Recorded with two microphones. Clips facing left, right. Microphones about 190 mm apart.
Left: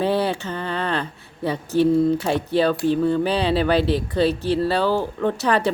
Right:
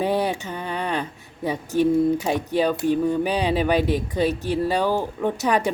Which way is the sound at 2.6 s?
15° right (ahead or behind).